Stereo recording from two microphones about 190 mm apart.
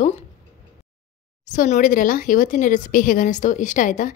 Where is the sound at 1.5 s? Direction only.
45° left (ahead or behind).